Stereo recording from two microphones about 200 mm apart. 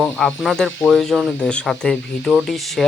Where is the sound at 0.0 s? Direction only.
Centre (ahead or behind).